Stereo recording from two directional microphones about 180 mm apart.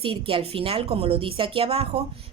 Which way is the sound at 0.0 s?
30° right (ahead or behind).